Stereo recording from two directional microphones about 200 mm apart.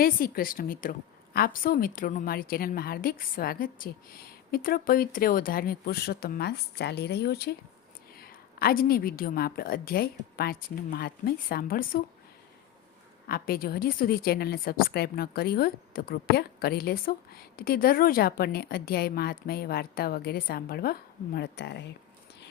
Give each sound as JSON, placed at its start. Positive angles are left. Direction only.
{"t": 0.0, "sound": "a woman's voice", "side_deg": 45}
{"t": 13.2, "sound": "a woman's voice", "side_deg": 50}